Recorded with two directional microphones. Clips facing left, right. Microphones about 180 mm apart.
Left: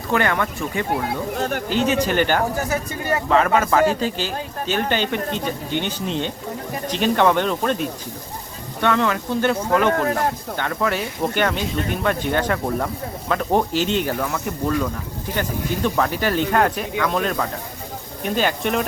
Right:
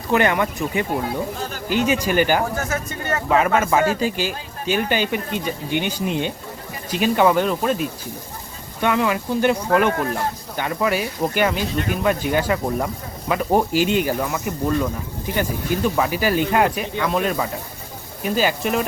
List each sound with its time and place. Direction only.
0.1 s speech: 20° right (ahead or behind)
1.0 s speech: 65° left (ahead or behind)
1.7 s speech: 10° right (ahead or behind)
2.6 s speech: 15° left (ahead or behind)
3.2 s speech: 10° right (ahead or behind)